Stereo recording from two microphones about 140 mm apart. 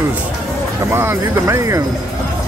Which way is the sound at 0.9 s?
20° right (ahead or behind).